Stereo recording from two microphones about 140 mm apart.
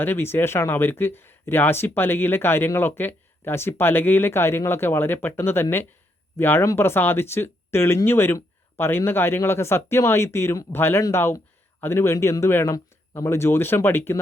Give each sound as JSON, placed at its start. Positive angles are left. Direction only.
{"t": 0.0, "sound": "speech", "side_deg": 15}